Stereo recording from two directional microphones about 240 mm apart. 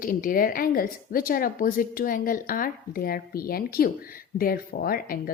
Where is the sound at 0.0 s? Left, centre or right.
Left.